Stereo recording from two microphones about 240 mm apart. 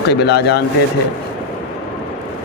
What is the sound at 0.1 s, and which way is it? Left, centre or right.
Speech, left.